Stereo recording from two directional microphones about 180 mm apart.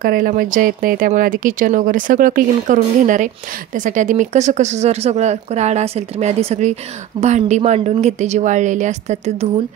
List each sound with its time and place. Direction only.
0.0 s speech: 50° right (ahead or behind)